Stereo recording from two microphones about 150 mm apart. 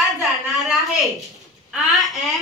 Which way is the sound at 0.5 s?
Centre (ahead or behind).